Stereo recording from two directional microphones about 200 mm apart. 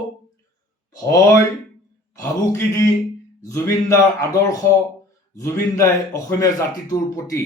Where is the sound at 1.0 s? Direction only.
15° left (ahead or behind).